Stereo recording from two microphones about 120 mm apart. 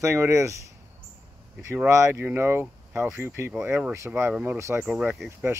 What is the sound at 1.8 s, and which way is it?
Speech, 25° right (ahead or behind).